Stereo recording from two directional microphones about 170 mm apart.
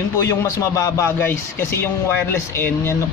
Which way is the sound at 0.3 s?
20° left (ahead or behind).